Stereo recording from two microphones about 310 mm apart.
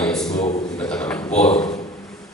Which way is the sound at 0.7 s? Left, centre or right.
Centre.